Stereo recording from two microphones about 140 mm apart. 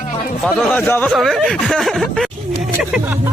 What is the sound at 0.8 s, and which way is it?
Speech, 15° left (ahead or behind).